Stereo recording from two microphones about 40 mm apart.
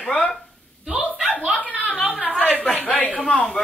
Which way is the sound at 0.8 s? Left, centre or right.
Centre.